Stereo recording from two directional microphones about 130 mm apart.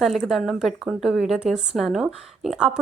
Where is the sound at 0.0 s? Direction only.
Centre (ahead or behind).